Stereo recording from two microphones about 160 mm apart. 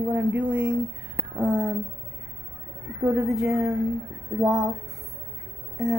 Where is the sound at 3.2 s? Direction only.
5° right (ahead or behind).